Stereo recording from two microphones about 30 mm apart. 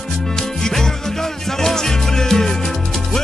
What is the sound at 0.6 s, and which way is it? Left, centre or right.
Music, centre.